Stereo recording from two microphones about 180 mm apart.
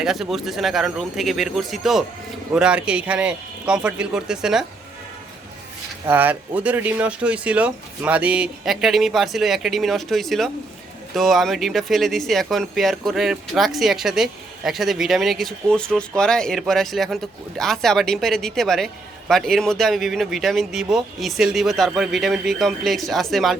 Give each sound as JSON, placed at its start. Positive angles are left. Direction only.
{"t": 0.0, "sound": "speech", "side_deg": 0}
{"t": 6.1, "sound": "speech", "side_deg": -10}